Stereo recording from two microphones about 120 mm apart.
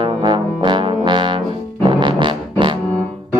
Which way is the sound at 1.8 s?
40° right (ahead or behind).